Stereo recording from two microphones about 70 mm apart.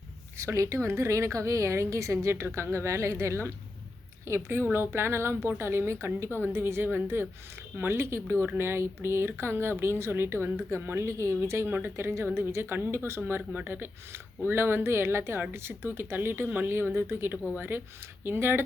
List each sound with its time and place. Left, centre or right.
0.4 s a woman's voice: right